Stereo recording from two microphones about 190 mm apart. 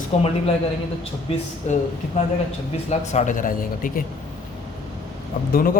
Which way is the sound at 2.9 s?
40° left (ahead or behind).